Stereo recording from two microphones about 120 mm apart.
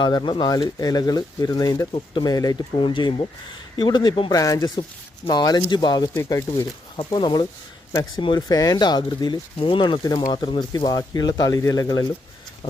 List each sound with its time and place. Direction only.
0.0 s speech: 40° left (ahead or behind)
2.7 s speech: 45° left (ahead or behind)
6.1 s speech: 25° left (ahead or behind)
6.9 s speech: 40° left (ahead or behind)